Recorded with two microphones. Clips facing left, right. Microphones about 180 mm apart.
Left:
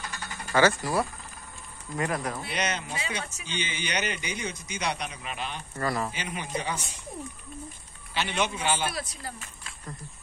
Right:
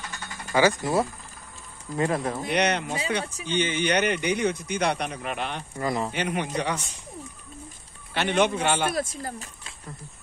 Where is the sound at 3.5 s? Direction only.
55° right (ahead or behind).